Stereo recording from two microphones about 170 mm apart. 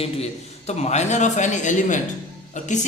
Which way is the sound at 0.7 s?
40° left (ahead or behind).